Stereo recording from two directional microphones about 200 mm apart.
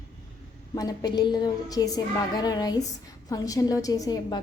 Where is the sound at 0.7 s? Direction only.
20° left (ahead or behind).